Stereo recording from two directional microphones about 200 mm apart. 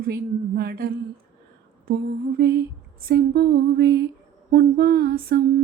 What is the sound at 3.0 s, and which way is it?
Humming, 50° right (ahead or behind).